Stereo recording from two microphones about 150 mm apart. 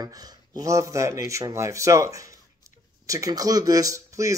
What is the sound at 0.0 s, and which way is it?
Speech, 25° right (ahead or behind).